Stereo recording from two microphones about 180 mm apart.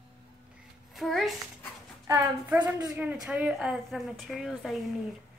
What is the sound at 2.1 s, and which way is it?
A woman's voice, 10° right (ahead or behind).